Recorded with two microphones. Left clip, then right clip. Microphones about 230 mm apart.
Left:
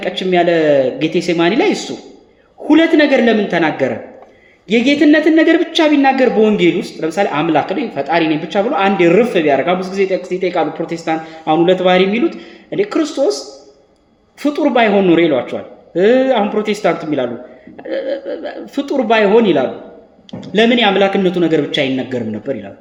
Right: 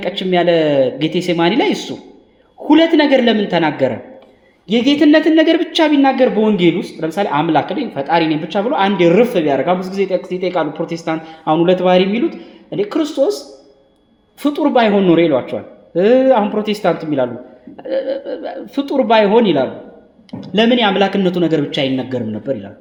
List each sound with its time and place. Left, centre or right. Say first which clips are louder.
0.0 s a woman's voice: left 1 dB; right
14.4 s a woman's voice: left 1 dB; right